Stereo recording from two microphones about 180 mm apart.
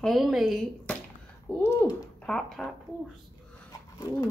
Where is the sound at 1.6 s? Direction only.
20° left (ahead or behind).